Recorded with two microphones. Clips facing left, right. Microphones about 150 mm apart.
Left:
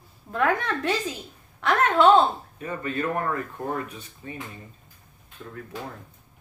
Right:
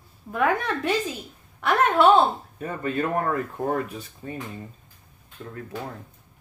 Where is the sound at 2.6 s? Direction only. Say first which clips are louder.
Right 2 dB; 40° right (ahead or behind).